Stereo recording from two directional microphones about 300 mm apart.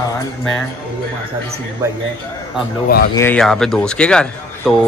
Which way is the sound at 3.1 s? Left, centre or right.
Centre.